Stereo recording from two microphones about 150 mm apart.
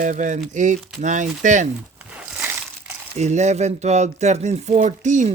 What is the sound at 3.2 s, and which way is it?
Speech, 50° right (ahead or behind).